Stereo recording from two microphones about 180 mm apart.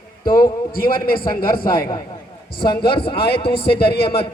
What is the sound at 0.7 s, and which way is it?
A man's voice, 55° left (ahead or behind).